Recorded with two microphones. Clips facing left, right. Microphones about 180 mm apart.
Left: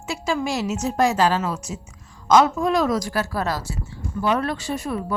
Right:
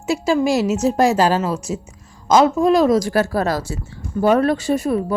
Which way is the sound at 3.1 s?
45° right (ahead or behind).